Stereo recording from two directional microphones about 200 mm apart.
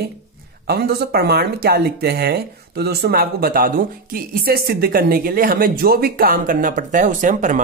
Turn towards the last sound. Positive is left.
turn(degrees=-40)  # may be behind; listen again after turning